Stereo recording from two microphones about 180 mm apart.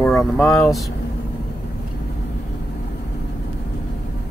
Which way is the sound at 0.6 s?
Centre (ahead or behind).